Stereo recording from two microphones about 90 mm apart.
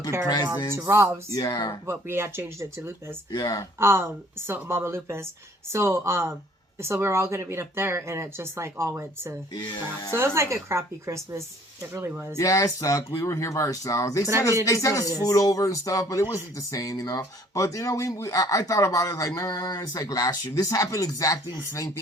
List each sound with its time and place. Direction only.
0.8 s speech: 30° right (ahead or behind)
1.3 s speech: 45° left (ahead or behind)
1.9 s speech: 25° right (ahead or behind)
3.3 s speech: 45° left (ahead or behind)
3.8 s a woman's voice: 30° right (ahead or behind)
12.4 s speech: 40° left (ahead or behind)